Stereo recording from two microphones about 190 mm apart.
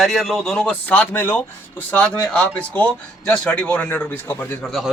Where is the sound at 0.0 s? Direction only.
Centre (ahead or behind).